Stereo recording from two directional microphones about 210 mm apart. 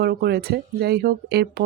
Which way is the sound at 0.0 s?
50° right (ahead or behind).